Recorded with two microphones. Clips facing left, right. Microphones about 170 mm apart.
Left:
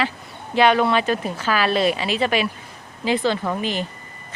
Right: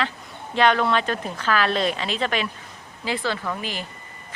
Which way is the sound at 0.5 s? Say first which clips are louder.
Left 3 dB; 5° left (ahead or behind).